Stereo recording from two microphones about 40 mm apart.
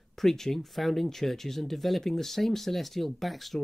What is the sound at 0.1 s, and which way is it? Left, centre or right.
Speech, centre.